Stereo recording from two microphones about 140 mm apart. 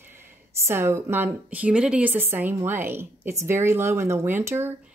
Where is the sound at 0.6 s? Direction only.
20° right (ahead or behind).